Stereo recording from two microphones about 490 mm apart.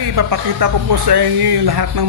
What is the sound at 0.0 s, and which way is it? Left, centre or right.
Speech, right.